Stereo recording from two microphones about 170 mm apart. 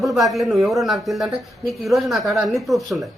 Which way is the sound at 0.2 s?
Centre (ahead or behind).